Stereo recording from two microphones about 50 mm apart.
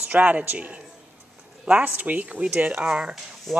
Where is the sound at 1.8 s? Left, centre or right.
Right.